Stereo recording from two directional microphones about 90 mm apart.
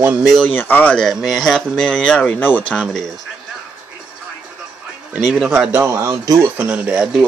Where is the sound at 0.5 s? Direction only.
20° left (ahead or behind).